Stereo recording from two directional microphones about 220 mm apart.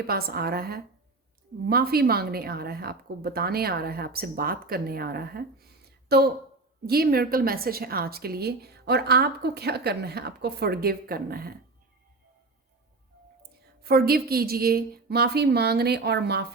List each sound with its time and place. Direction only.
0.1 s a woman's voice: 45° right (ahead or behind)
13.5 s a woman's voice: 45° right (ahead or behind)